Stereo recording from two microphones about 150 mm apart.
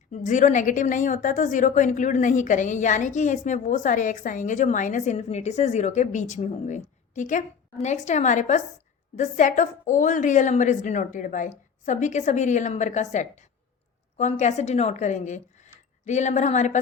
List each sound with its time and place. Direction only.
0.1 s a woman's voice: 55° left (ahead or behind)